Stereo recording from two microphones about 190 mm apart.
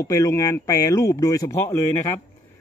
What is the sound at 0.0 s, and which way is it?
A man's voice, 15° left (ahead or behind).